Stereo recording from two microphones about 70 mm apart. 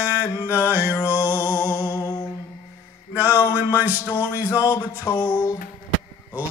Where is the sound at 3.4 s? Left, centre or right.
Right.